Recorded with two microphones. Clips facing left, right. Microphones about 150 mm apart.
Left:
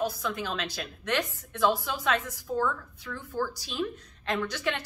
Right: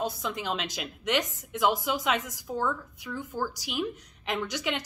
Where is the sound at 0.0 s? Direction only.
20° right (ahead or behind).